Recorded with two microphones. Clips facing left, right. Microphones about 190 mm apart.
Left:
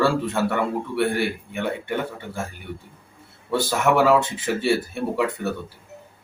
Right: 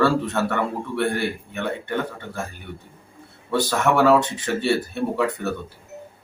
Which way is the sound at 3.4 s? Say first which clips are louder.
Even; 5° left (ahead or behind).